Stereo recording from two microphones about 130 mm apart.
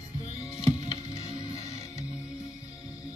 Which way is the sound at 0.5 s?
50° left (ahead or behind).